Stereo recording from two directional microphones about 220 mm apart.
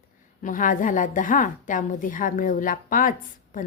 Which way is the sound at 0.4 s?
35° left (ahead or behind).